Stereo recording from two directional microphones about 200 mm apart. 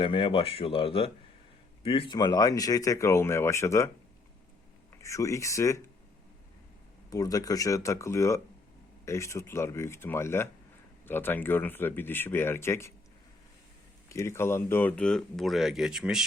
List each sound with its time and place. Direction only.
0.0 s speech: 25° left (ahead or behind)
5.0 s speech: 15° left (ahead or behind)
7.1 s speech: 15° left (ahead or behind)
14.1 s speech: 15° left (ahead or behind); by 16.2 s centre (ahead or behind)